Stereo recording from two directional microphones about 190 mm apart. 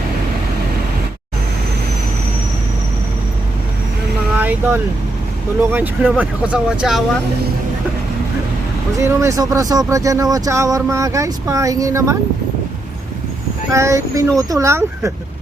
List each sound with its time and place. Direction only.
4.4 s vehicle: 10° right (ahead or behind)
5.7 s speech: 10° right (ahead or behind)
9.0 s speech: 15° right (ahead or behind)
13.7 s speech: 15° right (ahead or behind)